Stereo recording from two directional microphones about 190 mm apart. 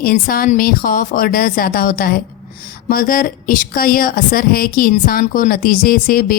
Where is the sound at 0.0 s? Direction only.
50° left (ahead or behind).